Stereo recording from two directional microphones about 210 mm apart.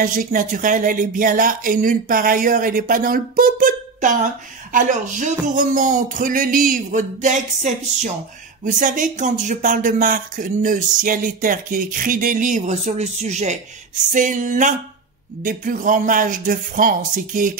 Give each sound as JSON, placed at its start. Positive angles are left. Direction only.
{"t": 0.0, "sound": "speech", "side_deg": -40}